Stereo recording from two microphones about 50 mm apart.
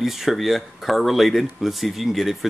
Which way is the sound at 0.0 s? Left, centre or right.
Centre.